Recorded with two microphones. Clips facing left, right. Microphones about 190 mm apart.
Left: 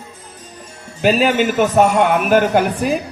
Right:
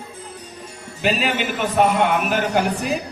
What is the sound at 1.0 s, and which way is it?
Speech, 45° left (ahead or behind).